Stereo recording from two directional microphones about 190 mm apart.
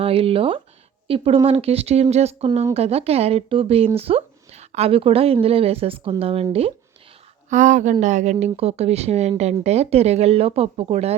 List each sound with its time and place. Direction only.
0.0 s speech: 30° right (ahead or behind)